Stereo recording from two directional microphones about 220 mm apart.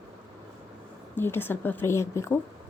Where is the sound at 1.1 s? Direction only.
10° left (ahead or behind).